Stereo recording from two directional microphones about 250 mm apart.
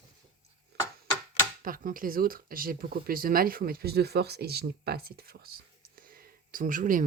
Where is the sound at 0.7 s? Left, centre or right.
Right.